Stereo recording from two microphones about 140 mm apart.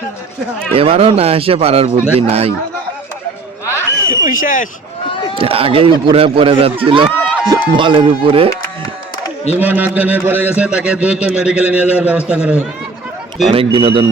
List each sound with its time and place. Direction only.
0.7 s a man's voice: 45° right (ahead or behind)
4.2 s speech: 70° left (ahead or behind)
5.3 s speech: 45° right (ahead or behind)
9.6 s a man's voice: 10° right (ahead or behind)
13.5 s speech: 40° right (ahead or behind)